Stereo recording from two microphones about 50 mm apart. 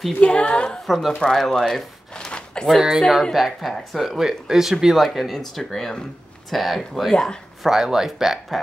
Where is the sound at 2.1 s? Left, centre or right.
Centre.